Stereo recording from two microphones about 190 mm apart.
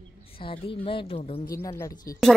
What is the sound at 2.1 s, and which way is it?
Speech, 15° left (ahead or behind).